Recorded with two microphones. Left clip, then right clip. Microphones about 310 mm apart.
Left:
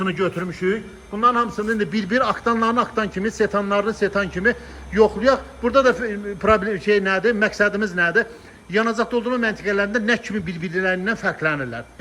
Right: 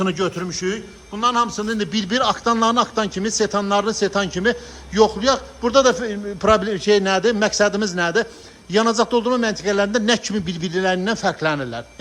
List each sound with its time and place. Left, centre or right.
0.0 s a man's voice: centre